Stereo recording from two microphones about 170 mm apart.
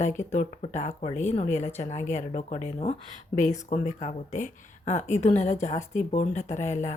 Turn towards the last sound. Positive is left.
turn(degrees=45)  # may be behind; listen again after turning